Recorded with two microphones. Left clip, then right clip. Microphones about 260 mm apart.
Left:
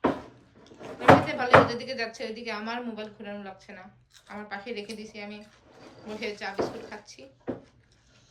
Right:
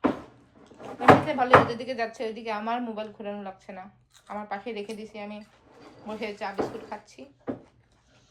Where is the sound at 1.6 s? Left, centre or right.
Centre.